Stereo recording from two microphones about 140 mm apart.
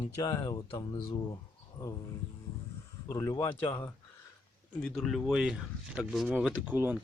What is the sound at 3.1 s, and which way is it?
Speech, 20° left (ahead or behind).